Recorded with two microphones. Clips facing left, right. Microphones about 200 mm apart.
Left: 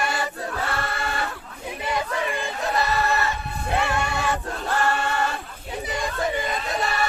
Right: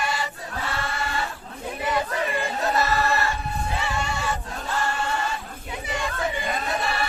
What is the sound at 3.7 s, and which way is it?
Choir, 60° left (ahead or behind).